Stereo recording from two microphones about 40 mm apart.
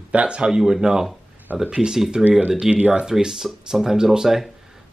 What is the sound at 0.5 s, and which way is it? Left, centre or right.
Speech, centre.